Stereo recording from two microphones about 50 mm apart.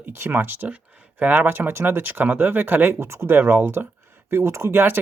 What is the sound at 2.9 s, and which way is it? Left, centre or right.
Speech, right.